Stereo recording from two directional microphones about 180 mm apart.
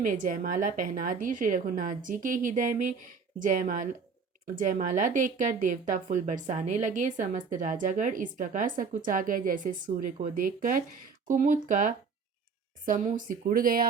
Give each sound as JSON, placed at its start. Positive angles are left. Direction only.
{"t": 0.0, "sound": "speech", "side_deg": -50}